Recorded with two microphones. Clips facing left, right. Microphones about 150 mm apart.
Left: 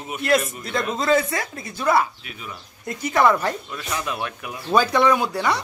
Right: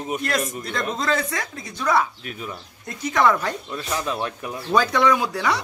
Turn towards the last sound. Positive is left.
turn(degrees=0)  # may be behind; listen again after turning